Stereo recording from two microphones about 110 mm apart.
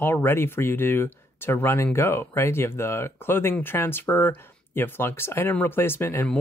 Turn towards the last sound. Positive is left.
turn(degrees=20)  # may be behind; listen again after turning